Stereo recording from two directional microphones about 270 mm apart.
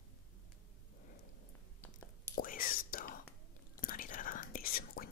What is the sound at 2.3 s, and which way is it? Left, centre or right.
Whispering, left.